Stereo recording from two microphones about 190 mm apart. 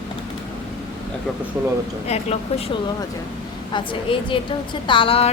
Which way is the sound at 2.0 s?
35° left (ahead or behind).